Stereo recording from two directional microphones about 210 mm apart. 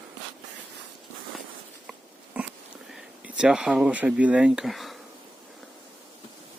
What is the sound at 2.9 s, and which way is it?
Speech, 5° right (ahead or behind).